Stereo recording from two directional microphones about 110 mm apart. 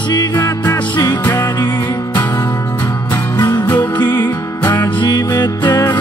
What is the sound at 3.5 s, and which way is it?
Music, 40° left (ahead or behind).